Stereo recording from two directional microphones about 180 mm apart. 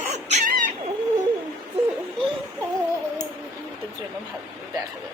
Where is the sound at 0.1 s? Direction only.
40° right (ahead or behind).